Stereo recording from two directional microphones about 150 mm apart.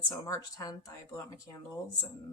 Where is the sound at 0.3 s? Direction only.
25° left (ahead or behind).